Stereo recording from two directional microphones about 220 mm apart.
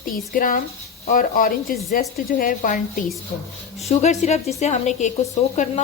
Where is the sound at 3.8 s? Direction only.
30° left (ahead or behind).